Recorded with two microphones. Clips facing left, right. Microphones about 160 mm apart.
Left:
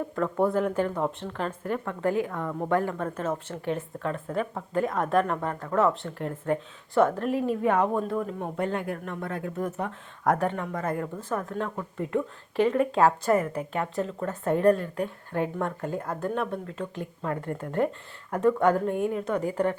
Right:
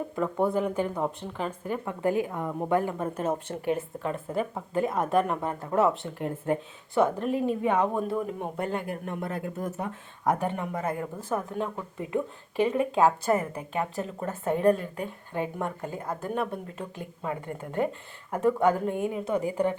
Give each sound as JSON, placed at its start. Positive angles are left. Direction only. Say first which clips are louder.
{"t": 0.2, "sound": "a woman's voice", "louder": "left 1 dB", "side_deg": -5}
{"t": 1.8, "sound": "speech", "louder": "right 1 dB", "side_deg": -15}
{"t": 5.8, "sound": "a woman's voice", "louder": "even", "side_deg": -5}
{"t": 6.9, "sound": "a woman's voice", "louder": "left 2 dB", "side_deg": 0}